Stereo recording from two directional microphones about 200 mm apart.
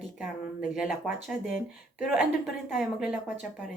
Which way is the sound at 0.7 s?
5° right (ahead or behind).